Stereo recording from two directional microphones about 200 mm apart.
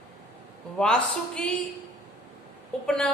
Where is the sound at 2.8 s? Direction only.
5° left (ahead or behind).